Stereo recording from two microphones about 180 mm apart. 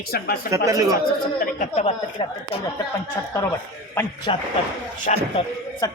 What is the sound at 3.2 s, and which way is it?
Speech, 15° left (ahead or behind).